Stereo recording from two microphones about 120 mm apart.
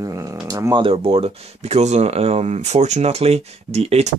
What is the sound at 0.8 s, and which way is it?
Speech, 50° right (ahead or behind).